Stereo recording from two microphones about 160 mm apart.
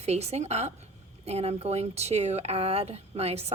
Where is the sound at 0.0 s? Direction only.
40° right (ahead or behind).